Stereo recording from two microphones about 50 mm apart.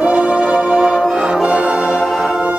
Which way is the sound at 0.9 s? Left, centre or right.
Centre.